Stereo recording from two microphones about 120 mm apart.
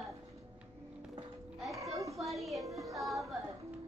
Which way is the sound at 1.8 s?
25° right (ahead or behind).